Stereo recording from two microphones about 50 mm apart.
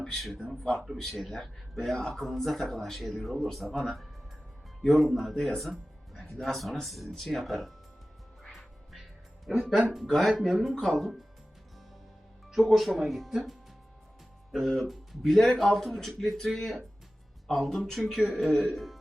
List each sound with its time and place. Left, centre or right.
0.9 s speech: centre
2.0 s speech: centre
2.2 s speech: centre
8.5 s music: centre
9.6 s speech: centre
12.5 s speech: centre